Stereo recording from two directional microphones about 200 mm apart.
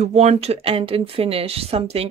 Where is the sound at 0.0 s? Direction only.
30° right (ahead or behind).